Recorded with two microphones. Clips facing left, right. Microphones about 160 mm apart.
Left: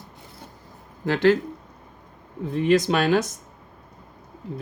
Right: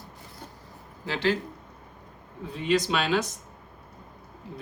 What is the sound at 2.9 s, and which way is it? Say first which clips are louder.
Speech: left 5 dB; 50° left (ahead or behind).